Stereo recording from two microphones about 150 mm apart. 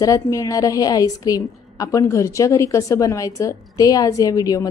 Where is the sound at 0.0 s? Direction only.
20° left (ahead or behind).